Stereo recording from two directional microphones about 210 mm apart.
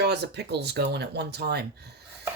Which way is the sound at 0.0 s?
55° right (ahead or behind).